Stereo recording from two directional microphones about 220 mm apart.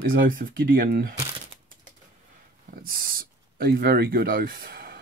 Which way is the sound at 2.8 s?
40° right (ahead or behind).